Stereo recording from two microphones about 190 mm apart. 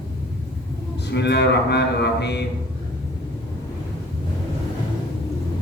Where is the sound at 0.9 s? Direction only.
60° left (ahead or behind).